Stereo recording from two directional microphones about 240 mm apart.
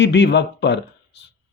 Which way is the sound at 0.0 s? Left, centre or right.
Left.